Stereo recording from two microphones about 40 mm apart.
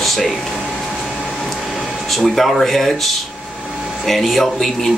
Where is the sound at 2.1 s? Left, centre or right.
Centre.